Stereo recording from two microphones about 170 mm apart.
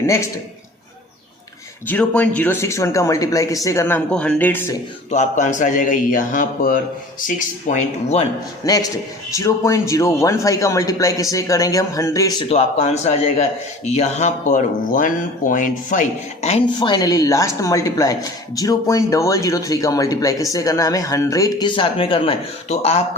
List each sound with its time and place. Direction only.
1.9 s speech: 10° left (ahead or behind)
5.1 s a man's voice: 45° left (ahead or behind)
8.6 s speech: 20° left (ahead or behind)
12.5 s speech: 40° left (ahead or behind)
16.8 s speech: 20° left (ahead or behind); by 23.0 s 40° left (ahead or behind)